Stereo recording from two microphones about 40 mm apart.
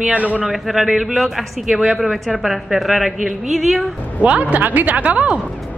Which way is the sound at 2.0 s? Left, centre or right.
Centre.